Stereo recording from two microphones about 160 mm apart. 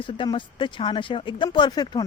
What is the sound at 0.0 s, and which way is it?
Speech, 30° left (ahead or behind).